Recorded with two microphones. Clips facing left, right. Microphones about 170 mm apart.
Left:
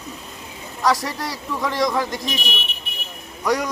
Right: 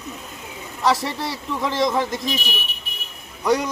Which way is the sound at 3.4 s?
25° right (ahead or behind).